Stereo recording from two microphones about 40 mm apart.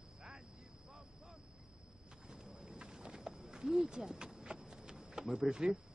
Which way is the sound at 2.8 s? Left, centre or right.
Centre.